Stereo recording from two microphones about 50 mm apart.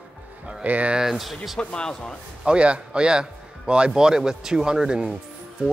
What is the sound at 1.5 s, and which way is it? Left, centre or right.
Speech, centre.